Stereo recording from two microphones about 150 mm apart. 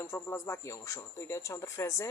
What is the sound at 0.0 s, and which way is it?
Speech, 15° left (ahead or behind).